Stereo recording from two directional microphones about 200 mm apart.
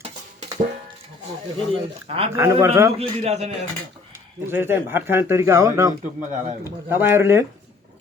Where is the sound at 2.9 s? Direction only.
30° right (ahead or behind).